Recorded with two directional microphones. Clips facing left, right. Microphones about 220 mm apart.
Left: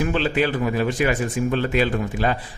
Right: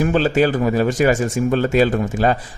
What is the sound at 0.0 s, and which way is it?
Speech, 40° right (ahead or behind).